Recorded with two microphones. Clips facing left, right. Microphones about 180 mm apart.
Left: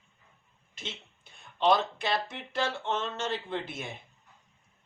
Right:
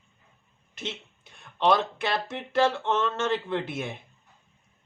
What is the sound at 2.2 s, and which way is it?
Speech, 60° right (ahead or behind).